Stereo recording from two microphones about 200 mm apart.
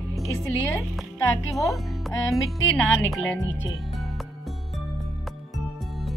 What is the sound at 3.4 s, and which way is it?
Speech, 70° left (ahead or behind).